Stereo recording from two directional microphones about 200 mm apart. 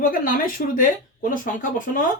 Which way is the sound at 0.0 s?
45° left (ahead or behind).